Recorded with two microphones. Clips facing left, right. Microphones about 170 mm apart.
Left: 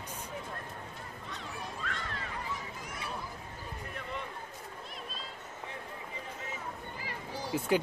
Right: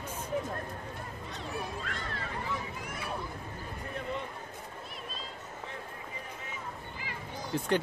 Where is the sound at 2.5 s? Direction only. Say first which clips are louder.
Right 6 dB; 65° right (ahead or behind).